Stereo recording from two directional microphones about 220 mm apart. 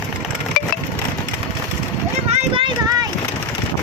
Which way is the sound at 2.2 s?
25° right (ahead or behind).